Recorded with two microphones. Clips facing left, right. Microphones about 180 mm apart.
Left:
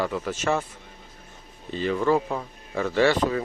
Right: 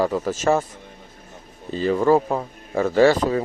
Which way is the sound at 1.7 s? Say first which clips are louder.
Right 5 dB; 40° right (ahead or behind).